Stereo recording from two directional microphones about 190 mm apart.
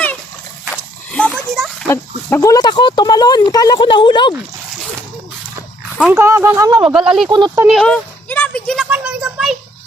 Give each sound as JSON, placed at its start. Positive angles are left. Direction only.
{"t": 0.7, "sound": "a sound", "side_deg": 5}
{"t": 1.9, "sound": "speech", "side_deg": 15}
{"t": 6.0, "sound": "speech", "side_deg": -10}
{"t": 6.8, "sound": "speech", "side_deg": -5}
{"t": 7.3, "sound": "speech", "side_deg": -25}
{"t": 7.6, "sound": "a sound", "side_deg": 0}